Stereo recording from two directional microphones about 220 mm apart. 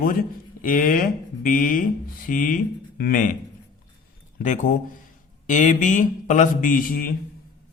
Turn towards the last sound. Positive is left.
turn(degrees=40)  # may be behind; listen again after turning